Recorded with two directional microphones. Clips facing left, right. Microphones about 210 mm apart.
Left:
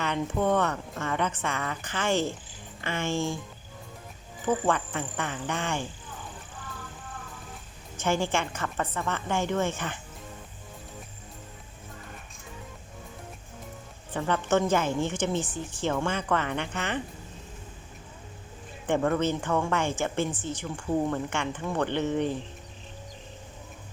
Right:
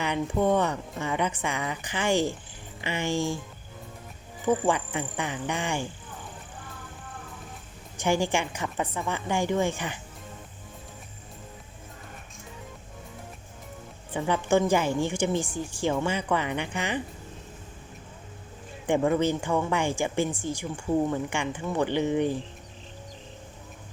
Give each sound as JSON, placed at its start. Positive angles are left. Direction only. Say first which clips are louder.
{"t": 0.0, "sound": "a woman's voice", "louder": "right 2 dB", "side_deg": -15}
{"t": 4.4, "sound": "a woman's voice", "louder": "right 2 dB", "side_deg": -10}
{"t": 7.9, "sound": "a woman's voice", "louder": "right 2 dB", "side_deg": -15}
{"t": 14.1, "sound": "a woman's voice", "louder": "right 2 dB", "side_deg": -10}
{"t": 18.9, "sound": "a woman's voice", "louder": "right 2 dB", "side_deg": -10}